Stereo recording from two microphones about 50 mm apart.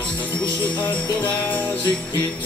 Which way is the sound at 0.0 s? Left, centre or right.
Left.